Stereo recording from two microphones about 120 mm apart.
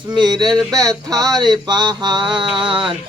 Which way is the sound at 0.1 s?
35° right (ahead or behind).